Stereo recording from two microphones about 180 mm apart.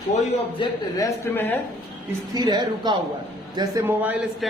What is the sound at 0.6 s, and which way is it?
Speech, 20° left (ahead or behind).